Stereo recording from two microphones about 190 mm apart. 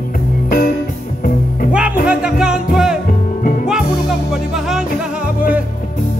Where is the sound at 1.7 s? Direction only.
5° right (ahead or behind).